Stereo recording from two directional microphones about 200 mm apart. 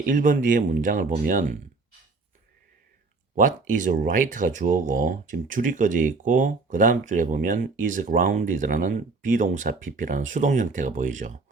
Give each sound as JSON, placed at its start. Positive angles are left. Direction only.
{"t": 0.0, "sound": "speech", "side_deg": -40}
{"t": 3.3, "sound": "speech", "side_deg": -40}